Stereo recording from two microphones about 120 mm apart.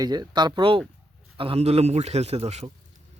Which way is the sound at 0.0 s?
35° right (ahead or behind).